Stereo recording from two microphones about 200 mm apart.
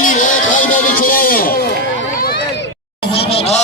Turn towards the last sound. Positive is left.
turn(degrees=30)  # may be behind; listen again after turning